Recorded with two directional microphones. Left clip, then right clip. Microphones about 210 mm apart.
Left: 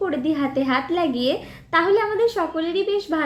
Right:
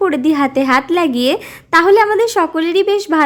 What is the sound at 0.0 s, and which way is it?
A woman's voice, 45° right (ahead or behind).